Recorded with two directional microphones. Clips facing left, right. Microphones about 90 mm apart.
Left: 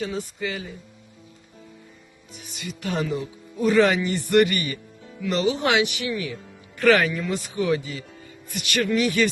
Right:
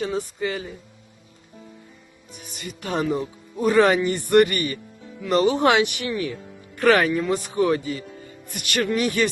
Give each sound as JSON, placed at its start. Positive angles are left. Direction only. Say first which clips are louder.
{"t": 0.0, "sound": "speech", "louder": "right 3 dB", "side_deg": -40}
{"t": 2.8, "sound": "a man's voice", "louder": "right 3 dB", "side_deg": -40}